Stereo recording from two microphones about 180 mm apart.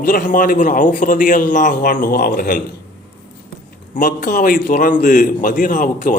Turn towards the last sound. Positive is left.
turn(degrees=50)  # may be behind; listen again after turning